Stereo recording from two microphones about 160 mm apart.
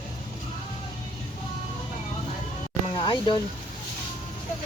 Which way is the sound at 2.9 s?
30° left (ahead or behind).